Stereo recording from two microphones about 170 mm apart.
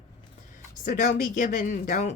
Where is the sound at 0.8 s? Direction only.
45° left (ahead or behind).